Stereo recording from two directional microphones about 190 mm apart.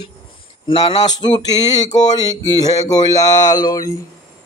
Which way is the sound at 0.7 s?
30° left (ahead or behind).